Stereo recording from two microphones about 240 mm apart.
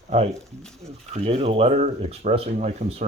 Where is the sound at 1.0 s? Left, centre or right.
Right.